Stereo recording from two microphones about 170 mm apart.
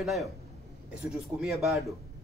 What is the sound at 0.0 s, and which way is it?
Speech, centre (ahead or behind).